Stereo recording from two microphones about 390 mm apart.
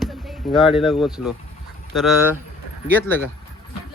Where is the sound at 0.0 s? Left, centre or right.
Centre.